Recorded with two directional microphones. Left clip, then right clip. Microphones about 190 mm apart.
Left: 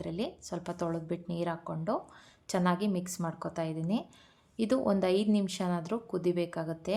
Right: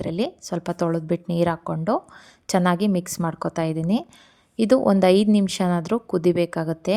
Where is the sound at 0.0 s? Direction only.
40° right (ahead or behind).